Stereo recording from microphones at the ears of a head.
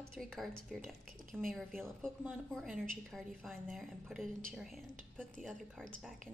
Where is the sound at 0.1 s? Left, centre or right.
Centre.